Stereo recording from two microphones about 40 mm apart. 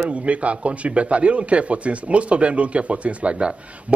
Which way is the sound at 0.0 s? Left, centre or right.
Right.